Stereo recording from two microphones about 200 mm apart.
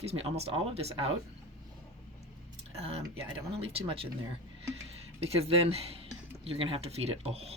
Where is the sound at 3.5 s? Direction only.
30° right (ahead or behind).